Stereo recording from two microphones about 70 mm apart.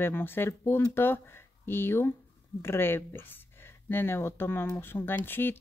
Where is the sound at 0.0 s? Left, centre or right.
Left.